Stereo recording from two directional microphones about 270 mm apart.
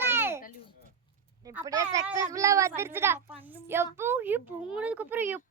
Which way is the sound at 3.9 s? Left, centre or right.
Centre.